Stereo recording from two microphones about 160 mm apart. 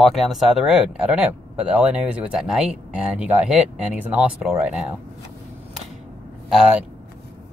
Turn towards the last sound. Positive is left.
turn(degrees=-5)  # may be behind; listen again after turning